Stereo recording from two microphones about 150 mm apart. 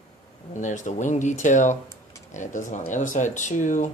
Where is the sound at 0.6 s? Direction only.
55° left (ahead or behind).